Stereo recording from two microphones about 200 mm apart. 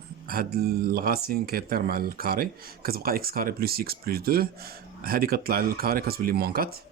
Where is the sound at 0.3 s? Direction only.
50° right (ahead or behind).